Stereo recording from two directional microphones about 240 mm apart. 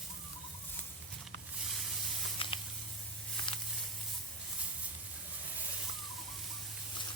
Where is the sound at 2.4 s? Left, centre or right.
Left.